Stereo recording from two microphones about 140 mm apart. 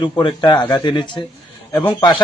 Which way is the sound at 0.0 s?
35° left (ahead or behind).